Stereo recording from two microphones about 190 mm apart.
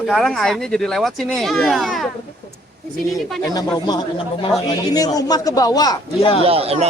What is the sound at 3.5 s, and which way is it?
Speech, 20° left (ahead or behind).